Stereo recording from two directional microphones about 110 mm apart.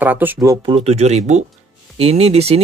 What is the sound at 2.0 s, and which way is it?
Speech, 70° right (ahead or behind).